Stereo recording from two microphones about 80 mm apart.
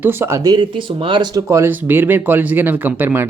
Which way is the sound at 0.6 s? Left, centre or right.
Right.